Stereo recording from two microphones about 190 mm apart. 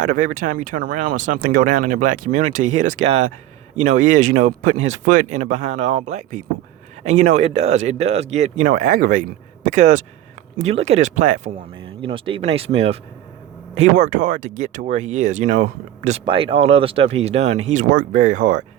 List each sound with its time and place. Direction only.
0.0 s speech: 45° right (ahead or behind)
12.0 s speech: 30° right (ahead or behind)
16.2 s speech: 30° right (ahead or behind)